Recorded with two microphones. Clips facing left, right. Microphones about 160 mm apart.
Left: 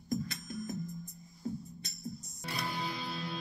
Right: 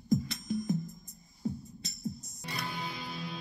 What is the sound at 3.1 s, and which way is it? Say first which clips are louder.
Music: left 1 dB; 15° right (ahead or behind).